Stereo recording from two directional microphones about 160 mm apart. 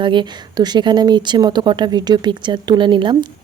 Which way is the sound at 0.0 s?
30° right (ahead or behind).